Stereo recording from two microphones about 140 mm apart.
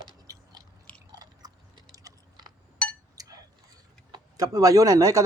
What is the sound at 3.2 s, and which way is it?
Chink, 25° right (ahead or behind).